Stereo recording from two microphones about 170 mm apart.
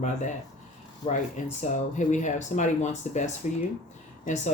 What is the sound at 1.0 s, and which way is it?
Speech, 30° left (ahead or behind).